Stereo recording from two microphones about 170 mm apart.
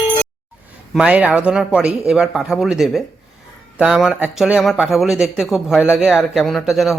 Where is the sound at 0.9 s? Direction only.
5° right (ahead or behind).